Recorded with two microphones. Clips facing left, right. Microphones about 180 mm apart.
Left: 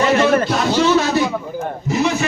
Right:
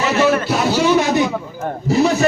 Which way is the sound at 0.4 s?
10° right (ahead or behind).